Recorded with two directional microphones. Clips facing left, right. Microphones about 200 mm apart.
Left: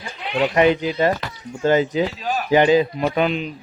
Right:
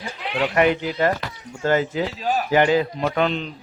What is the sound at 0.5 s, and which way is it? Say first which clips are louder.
A man's voice: left 2 dB; 20° left (ahead or behind).